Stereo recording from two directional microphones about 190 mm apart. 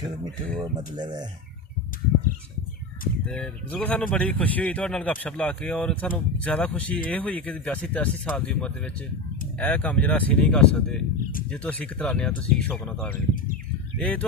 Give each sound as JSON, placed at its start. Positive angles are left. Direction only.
{"t": 0.6, "sound": "speech", "side_deg": -20}
{"t": 3.2, "sound": "speech", "side_deg": 5}